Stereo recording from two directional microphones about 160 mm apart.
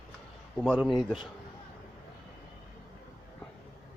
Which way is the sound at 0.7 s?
Centre (ahead or behind).